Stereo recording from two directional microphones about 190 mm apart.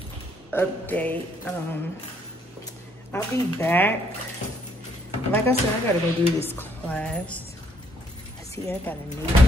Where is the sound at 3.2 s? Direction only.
10° left (ahead or behind).